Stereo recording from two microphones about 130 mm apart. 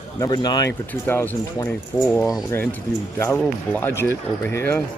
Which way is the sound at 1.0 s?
20° left (ahead or behind).